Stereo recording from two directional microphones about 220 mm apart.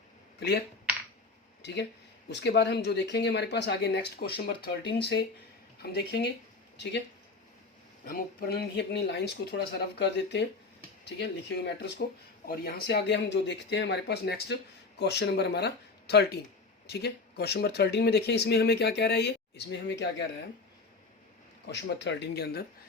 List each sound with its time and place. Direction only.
0.3 s speech: 50° left (ahead or behind)
1.6 s speech: 50° left (ahead or behind)
5.8 s speech: 50° left (ahead or behind)
8.0 s speech: 40° left (ahead or behind)
21.7 s speech: 55° left (ahead or behind)